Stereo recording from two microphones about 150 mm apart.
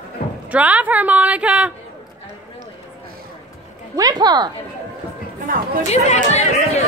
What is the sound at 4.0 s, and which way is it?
Speech, 25° right (ahead or behind).